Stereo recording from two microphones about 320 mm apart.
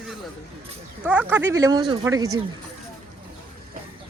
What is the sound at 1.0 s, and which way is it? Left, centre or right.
Speech, centre.